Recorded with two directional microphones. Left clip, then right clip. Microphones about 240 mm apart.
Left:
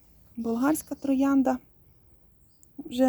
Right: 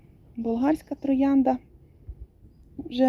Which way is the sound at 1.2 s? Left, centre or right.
Left.